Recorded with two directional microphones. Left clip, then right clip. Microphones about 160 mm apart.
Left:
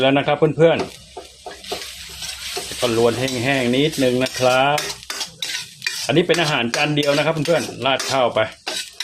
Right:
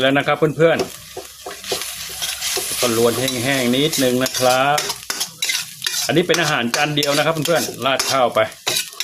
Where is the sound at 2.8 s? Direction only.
15° right (ahead or behind).